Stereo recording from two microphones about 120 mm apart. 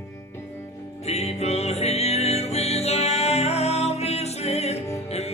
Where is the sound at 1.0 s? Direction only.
60° left (ahead or behind).